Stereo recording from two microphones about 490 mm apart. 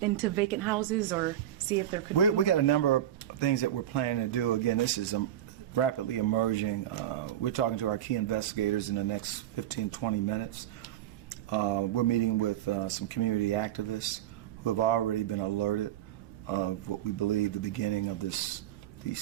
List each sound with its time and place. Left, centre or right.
0.0 s speech: centre
2.1 s a man's voice: left
5.7 s speech: left
11.4 s speech: left